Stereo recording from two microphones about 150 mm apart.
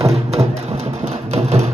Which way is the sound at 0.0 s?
45° right (ahead or behind).